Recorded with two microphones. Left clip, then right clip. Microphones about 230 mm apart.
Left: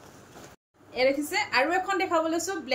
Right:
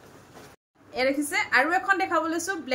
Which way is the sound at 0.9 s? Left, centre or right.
Centre.